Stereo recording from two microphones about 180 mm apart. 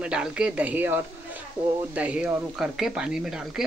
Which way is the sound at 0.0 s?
5° right (ahead or behind).